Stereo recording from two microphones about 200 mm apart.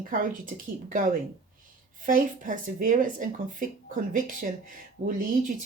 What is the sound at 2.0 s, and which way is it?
Speech, 40° right (ahead or behind).